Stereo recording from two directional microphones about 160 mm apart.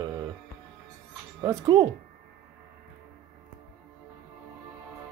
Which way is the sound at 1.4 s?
25° right (ahead or behind).